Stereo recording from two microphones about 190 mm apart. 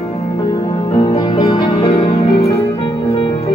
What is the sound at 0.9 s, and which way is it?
Music, 20° left (ahead or behind).